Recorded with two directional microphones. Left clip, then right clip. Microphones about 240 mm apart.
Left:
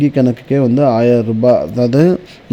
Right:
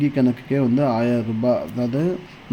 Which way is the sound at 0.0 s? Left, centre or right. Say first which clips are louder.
Left 7 dB; left.